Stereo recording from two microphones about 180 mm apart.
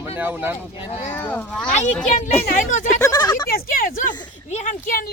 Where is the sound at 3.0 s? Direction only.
20° left (ahead or behind).